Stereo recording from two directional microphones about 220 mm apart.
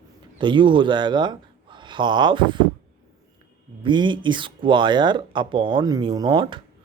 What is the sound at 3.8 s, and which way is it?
Speech, 20° right (ahead or behind).